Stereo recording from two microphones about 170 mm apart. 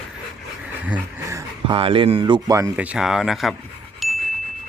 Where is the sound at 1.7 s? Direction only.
30° right (ahead or behind).